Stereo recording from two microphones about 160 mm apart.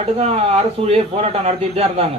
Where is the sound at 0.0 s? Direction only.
40° right (ahead or behind).